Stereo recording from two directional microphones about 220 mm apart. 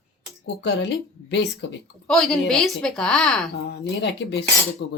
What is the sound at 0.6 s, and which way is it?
Speech, 50° left (ahead or behind).